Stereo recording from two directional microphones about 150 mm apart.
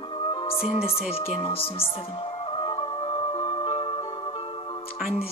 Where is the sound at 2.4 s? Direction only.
35° left (ahead or behind).